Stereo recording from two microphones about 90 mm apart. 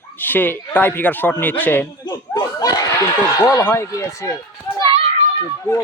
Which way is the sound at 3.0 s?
40° left (ahead or behind).